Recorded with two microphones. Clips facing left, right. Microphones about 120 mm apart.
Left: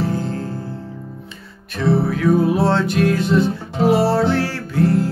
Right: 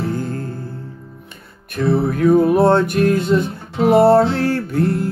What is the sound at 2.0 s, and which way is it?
Music, 50° right (ahead or behind).